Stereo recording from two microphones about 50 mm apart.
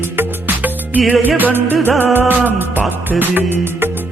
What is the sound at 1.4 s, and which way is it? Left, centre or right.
Music of bollywood, right.